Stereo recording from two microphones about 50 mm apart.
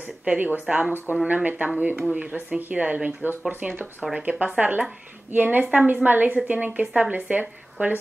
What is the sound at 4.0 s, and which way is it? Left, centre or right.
A woman's voice, right.